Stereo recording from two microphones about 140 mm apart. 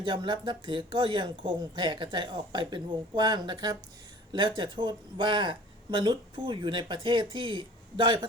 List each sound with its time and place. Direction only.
0.0 s speech: 35° right (ahead or behind)